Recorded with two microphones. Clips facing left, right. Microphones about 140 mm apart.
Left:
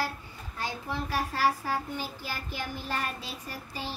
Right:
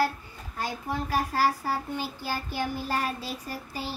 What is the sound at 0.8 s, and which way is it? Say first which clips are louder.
Speech: right 4 dB; 45° right (ahead or behind).